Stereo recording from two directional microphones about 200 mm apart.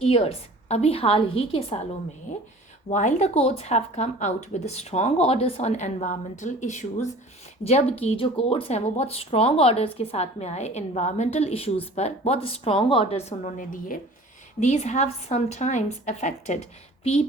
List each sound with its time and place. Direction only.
0.0 s a woman's voice: 30° left (ahead or behind)